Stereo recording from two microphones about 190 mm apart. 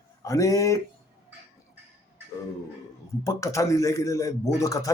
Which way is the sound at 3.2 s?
15° left (ahead or behind).